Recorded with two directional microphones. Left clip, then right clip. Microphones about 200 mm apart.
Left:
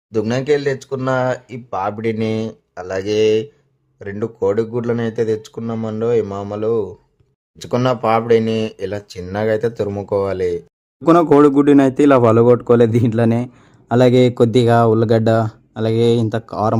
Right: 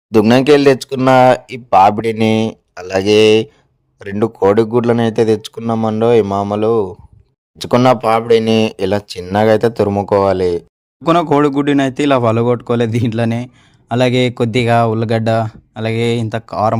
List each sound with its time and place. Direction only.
0.1 s a man's voice: 35° right (ahead or behind)